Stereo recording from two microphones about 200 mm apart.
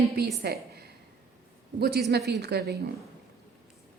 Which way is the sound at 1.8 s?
55° right (ahead or behind).